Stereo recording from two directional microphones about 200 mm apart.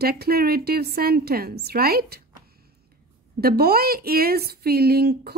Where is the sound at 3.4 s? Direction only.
50° right (ahead or behind).